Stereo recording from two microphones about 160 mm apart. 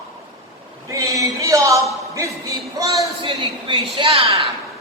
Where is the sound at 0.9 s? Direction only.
20° right (ahead or behind).